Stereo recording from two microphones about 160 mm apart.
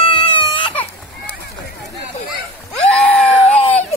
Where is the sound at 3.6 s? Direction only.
40° left (ahead or behind).